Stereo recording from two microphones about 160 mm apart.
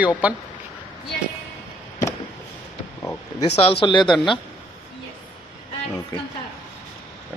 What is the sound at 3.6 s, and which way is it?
Speech, 35° left (ahead or behind).